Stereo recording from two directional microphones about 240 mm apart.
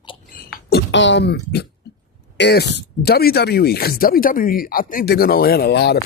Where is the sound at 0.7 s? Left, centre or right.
Left.